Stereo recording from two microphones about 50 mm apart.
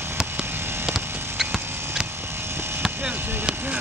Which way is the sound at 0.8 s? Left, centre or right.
Centre.